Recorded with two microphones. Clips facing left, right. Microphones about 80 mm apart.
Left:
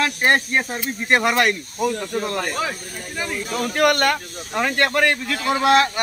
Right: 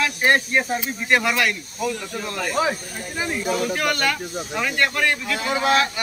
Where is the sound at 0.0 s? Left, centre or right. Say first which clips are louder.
Left 1 dB; left.